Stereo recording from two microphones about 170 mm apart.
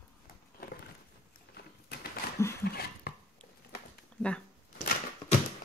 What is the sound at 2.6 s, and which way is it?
Dishes, 65° left (ahead or behind).